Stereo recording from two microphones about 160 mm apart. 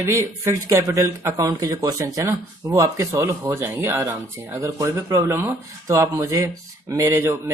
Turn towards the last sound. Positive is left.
turn(degrees=-15)  # may be behind; listen again after turning